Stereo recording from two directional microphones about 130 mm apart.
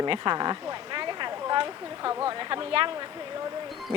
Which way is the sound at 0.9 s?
35° right (ahead or behind).